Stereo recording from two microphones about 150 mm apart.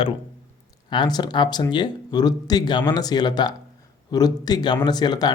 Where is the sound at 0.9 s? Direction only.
30° left (ahead or behind).